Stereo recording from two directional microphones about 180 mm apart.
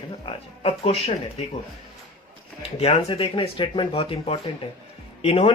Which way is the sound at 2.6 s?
35° left (ahead or behind).